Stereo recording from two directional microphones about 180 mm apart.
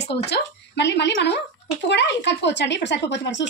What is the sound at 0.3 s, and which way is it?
A woman's voice, 70° left (ahead or behind).